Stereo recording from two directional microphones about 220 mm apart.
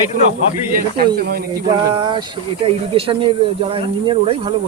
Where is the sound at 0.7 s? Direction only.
45° right (ahead or behind).